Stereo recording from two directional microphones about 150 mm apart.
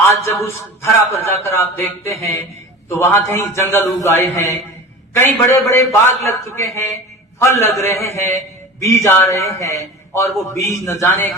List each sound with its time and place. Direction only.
0.1 s a man's voice: 20° left (ahead or behind)